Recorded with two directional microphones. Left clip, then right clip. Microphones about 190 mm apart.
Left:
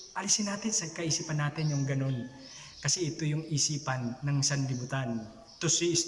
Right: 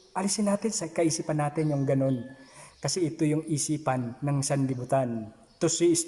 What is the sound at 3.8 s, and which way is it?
Speech, 20° right (ahead or behind).